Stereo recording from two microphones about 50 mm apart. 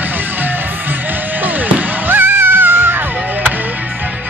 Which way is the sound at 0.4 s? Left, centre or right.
Right.